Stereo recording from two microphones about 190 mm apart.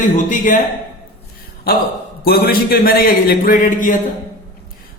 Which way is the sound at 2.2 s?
55° left (ahead or behind).